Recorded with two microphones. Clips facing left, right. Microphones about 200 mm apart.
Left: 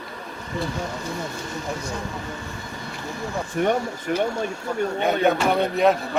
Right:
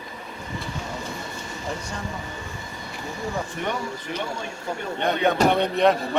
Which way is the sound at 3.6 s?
50° left (ahead or behind).